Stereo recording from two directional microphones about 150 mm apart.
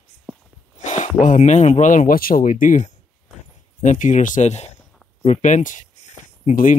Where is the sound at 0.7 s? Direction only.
55° left (ahead or behind).